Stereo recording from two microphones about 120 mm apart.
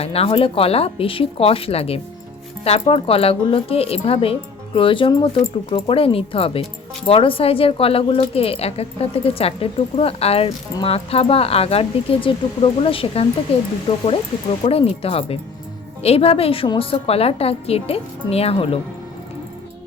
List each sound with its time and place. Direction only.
0.0 s a woman's voice: 55° left (ahead or behind)